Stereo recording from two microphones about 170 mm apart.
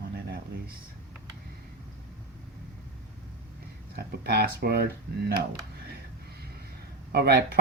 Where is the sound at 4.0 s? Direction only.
70° right (ahead or behind).